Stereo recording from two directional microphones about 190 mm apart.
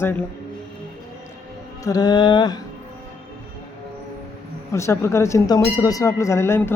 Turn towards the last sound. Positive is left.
turn(degrees=15)  # may be behind; listen again after turning